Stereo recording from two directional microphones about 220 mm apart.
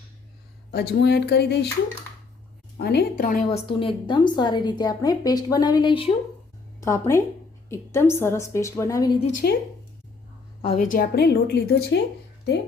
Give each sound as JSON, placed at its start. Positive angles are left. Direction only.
{"t": 0.7, "sound": "a woman's voice", "side_deg": 45}
{"t": 2.8, "sound": "a woman's voice", "side_deg": 45}
{"t": 3.7, "sound": "a woman's voice", "side_deg": 25}
{"t": 9.4, "sound": "a woman's voice", "side_deg": 45}
{"t": 10.6, "sound": "a woman's voice", "side_deg": 25}
{"t": 10.8, "sound": "a woman's voice", "side_deg": 40}